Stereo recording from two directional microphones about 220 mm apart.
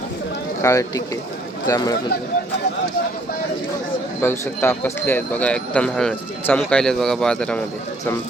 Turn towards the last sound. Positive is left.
turn(degrees=5)  # may be behind; listen again after turning